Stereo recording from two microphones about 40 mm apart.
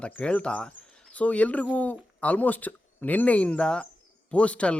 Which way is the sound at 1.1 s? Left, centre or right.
Left.